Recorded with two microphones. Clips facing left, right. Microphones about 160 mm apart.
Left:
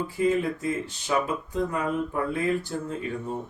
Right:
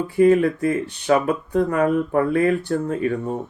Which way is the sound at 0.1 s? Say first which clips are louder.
Right 11 dB; 60° right (ahead or behind).